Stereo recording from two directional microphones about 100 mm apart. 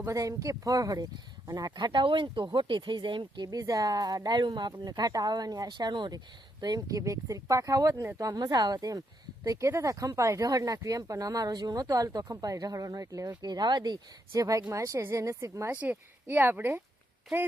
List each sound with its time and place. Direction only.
0.1 s speech: 35° right (ahead or behind)
15.7 s speech: 20° right (ahead or behind)